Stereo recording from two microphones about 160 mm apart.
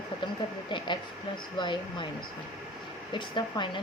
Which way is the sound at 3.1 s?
30° left (ahead or behind).